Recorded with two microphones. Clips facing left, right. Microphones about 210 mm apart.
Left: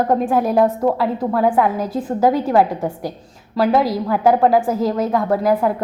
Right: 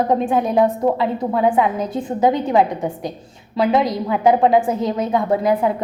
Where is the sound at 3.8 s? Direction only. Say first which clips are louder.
Left 1 dB; 5° left (ahead or behind).